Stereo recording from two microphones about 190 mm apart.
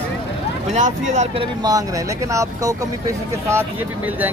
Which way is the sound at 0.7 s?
40° right (ahead or behind).